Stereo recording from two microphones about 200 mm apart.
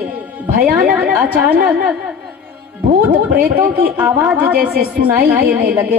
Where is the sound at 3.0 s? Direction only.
10° right (ahead or behind).